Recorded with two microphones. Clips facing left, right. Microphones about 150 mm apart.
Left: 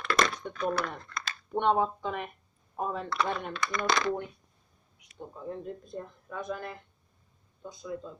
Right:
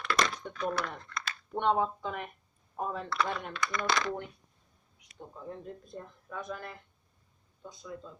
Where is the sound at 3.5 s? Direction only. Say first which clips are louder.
Left 2 dB; 30° left (ahead or behind).